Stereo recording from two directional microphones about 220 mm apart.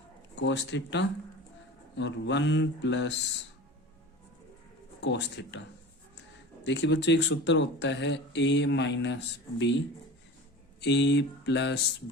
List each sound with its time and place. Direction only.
0.3 s speech: 55° left (ahead or behind)
4.9 s speech: 50° left (ahead or behind)
6.7 s speech: 55° left (ahead or behind)
10.8 s speech: 50° left (ahead or behind)